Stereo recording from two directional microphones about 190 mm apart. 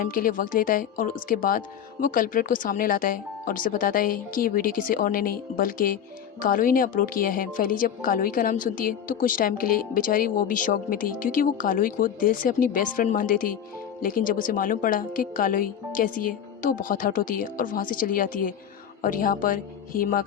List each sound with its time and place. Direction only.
0.0 s a woman's voice: 50° left (ahead or behind)